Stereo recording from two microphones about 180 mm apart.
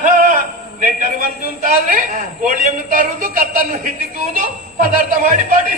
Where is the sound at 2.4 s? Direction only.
50° right (ahead or behind).